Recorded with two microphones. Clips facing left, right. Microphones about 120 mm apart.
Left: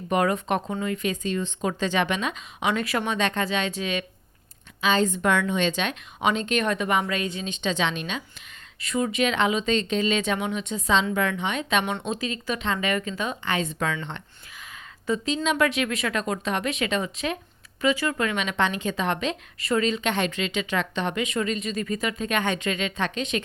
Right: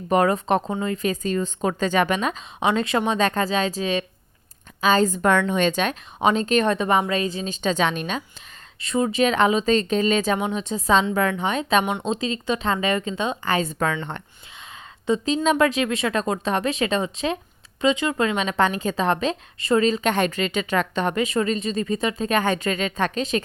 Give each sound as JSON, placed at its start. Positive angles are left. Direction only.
{"t": 0.1, "sound": "a woman's voice", "side_deg": -35}
{"t": 8.8, "sound": "a woman's voice", "side_deg": -30}
{"t": 13.4, "sound": "speech", "side_deg": -40}
{"t": 15.0, "sound": "a woman's voice", "side_deg": -30}